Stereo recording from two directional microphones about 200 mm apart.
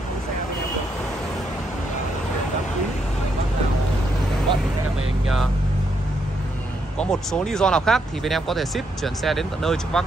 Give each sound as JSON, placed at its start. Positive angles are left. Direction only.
{"t": 7.0, "sound": "speech", "side_deg": 5}